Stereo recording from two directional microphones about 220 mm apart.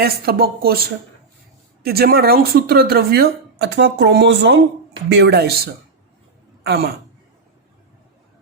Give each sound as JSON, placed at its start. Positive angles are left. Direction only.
{"t": 0.0, "sound": "speech", "side_deg": -45}
{"t": 1.8, "sound": "speech", "side_deg": -45}
{"t": 6.6, "sound": "a man's voice", "side_deg": -45}